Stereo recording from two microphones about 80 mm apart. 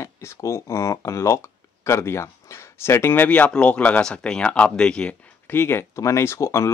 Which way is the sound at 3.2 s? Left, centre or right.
Centre.